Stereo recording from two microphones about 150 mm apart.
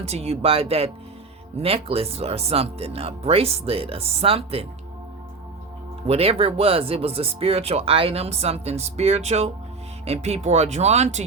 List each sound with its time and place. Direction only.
0.0 s speech: 45° right (ahead or behind)
6.1 s speech: 40° right (ahead or behind)